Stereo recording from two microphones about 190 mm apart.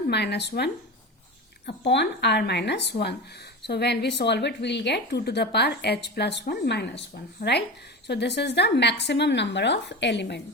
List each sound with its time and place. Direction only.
0.1 s a woman's voice: 60° left (ahead or behind)
8.0 s a woman's voice: 65° left (ahead or behind)